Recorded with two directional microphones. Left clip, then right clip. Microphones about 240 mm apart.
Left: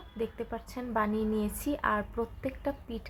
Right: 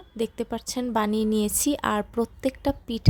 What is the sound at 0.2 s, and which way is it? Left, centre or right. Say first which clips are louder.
Speech: right 6 dB; right.